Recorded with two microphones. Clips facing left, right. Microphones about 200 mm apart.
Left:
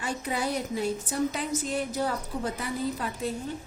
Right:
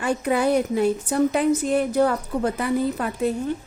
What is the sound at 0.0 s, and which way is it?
A woman's voice, 60° right (ahead or behind).